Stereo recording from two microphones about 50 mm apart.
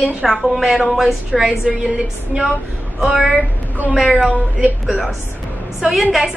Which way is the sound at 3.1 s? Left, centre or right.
Right.